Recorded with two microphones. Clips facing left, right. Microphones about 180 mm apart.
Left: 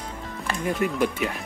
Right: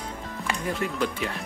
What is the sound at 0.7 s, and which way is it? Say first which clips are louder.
Speech: left 4 dB; 15° left (ahead or behind).